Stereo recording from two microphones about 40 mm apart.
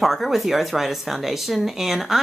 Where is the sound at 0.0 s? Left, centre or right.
Centre.